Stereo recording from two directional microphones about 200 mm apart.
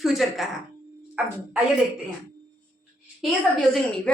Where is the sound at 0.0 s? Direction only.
Centre (ahead or behind).